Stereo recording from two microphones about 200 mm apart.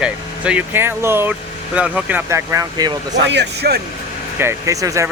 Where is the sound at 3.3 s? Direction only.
55° right (ahead or behind).